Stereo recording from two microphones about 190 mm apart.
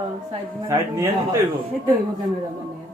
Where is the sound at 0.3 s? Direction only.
15° right (ahead or behind).